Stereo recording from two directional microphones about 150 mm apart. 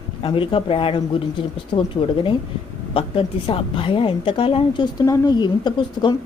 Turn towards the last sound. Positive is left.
turn(degrees=30)  # may be behind; listen again after turning